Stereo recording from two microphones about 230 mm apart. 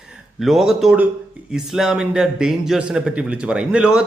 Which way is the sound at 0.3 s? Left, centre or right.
Centre.